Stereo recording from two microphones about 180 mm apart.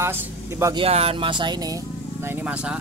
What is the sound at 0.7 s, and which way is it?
Speech, 30° right (ahead or behind).